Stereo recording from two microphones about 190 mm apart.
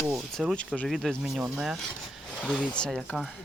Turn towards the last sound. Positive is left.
turn(degrees=0)  # may be behind; listen again after turning